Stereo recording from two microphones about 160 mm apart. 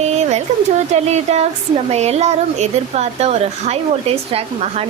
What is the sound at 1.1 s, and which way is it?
Speech, 45° right (ahead or behind).